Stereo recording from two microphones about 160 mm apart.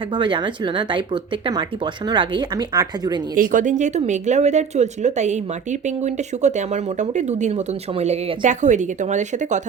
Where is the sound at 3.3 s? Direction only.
55° right (ahead or behind).